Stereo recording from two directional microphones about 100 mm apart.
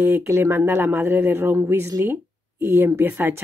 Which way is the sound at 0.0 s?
25° right (ahead or behind).